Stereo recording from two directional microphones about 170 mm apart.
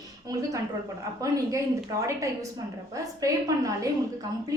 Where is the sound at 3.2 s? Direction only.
20° right (ahead or behind).